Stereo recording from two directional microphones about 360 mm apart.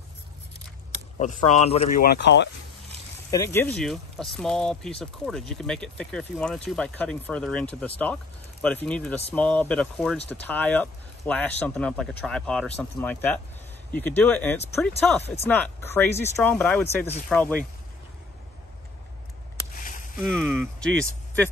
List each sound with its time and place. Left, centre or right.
1.2 s speech: centre
3.3 s speech: centre
20.2 s speech: centre